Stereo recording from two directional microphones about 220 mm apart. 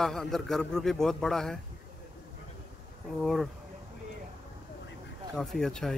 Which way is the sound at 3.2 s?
Centre (ahead or behind).